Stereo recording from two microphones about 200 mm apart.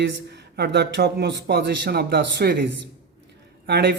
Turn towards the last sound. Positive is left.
turn(degrees=-60)  # may be behind; listen again after turning